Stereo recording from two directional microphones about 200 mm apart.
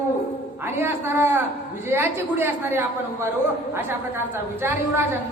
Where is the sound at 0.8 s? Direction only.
10° right (ahead or behind).